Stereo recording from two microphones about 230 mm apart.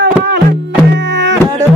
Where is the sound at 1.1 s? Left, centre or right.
Right.